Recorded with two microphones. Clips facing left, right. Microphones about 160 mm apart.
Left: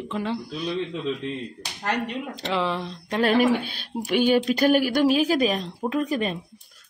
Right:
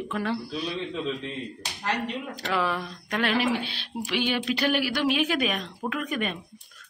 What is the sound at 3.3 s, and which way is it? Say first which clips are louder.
Speech: left 5 dB; 45° left (ahead or behind).